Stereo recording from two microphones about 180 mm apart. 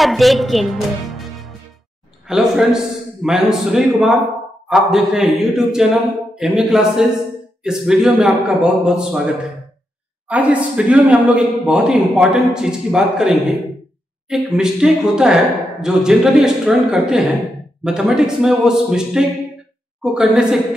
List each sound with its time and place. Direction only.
0.0 s a woman's voice: centre (ahead or behind)